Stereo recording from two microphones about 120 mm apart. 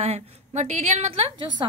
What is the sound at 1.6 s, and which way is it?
Speech, 40° right (ahead or behind).